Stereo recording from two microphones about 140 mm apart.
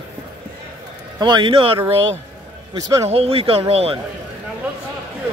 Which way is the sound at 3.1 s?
45° right (ahead or behind).